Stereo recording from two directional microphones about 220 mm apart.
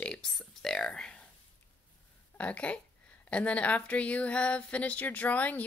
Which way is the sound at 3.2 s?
5° left (ahead or behind).